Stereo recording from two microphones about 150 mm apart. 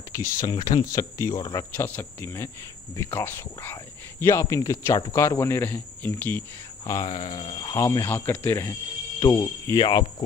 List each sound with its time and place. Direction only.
0.1 s speech: 20° left (ahead or behind)
3.0 s cricket: 15° left (ahead or behind)
6.9 s speech: 25° left (ahead or behind)
7.7 s cricket: 20° left (ahead or behind)
9.2 s speech: 20° left (ahead or behind)